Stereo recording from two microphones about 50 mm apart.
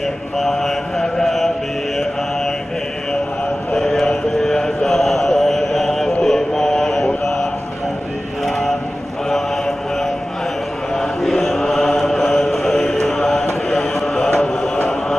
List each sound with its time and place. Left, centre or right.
0.4 s mantra: centre
4.0 s a sound: centre
6.2 s mantra: centre
8.5 s a sound: centre
11.0 s chant: centre
14.4 s mantra: centre